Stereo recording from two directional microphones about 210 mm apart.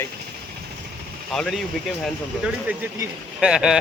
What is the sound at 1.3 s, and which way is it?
Speech, centre (ahead or behind).